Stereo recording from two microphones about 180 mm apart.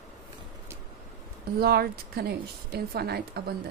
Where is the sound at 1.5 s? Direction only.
60° right (ahead or behind).